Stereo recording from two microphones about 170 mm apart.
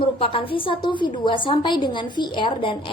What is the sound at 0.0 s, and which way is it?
A woman's voice, 30° left (ahead or behind).